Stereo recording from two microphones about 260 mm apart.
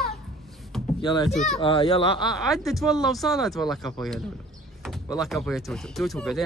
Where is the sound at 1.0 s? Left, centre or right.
Centre.